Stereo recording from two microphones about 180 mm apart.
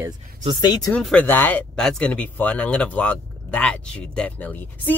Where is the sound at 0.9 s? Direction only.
5° left (ahead or behind).